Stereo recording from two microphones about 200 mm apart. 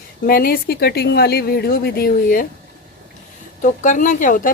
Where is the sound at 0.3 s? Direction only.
45° left (ahead or behind).